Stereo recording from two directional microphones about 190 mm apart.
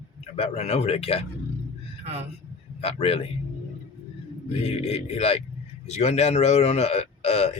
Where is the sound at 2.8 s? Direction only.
30° left (ahead or behind).